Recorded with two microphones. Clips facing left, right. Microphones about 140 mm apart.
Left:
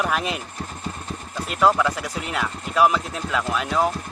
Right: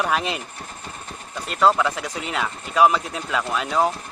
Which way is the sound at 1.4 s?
5° left (ahead or behind).